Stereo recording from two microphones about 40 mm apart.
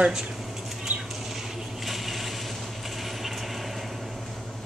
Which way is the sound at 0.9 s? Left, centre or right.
Right.